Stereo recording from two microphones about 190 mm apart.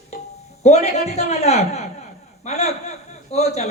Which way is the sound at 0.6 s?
35° left (ahead or behind).